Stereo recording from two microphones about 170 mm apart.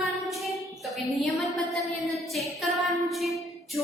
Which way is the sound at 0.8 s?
Centre (ahead or behind).